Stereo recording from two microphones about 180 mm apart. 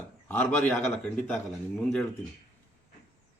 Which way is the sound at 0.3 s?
5° left (ahead or behind).